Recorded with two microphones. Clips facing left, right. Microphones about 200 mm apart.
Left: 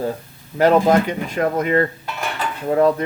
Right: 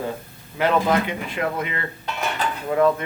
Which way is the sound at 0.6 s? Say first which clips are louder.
Left 6 dB; 40° left (ahead or behind).